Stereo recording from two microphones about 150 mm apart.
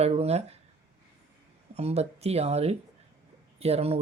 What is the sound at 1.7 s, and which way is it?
Speech, 45° right (ahead or behind).